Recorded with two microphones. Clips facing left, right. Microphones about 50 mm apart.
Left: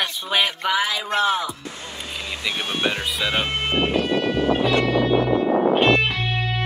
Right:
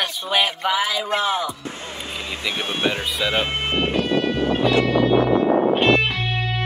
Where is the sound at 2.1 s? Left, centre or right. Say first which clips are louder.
Even; right.